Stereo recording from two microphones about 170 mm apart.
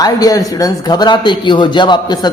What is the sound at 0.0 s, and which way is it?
A man's voice, 20° left (ahead or behind).